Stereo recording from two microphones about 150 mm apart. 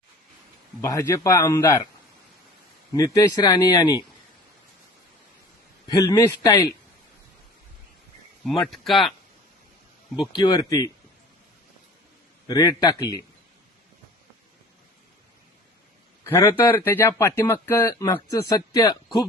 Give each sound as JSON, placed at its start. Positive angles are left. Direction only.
{"t": 0.8, "sound": "speech", "side_deg": 20}
{"t": 2.9, "sound": "speech", "side_deg": 25}
{"t": 5.9, "sound": "speech", "side_deg": 25}
{"t": 8.4, "sound": "speech", "side_deg": 0}
{"t": 10.3, "sound": "speech", "side_deg": 25}
{"t": 12.5, "sound": "speech", "side_deg": 25}
{"t": 16.2, "sound": "speech", "side_deg": 20}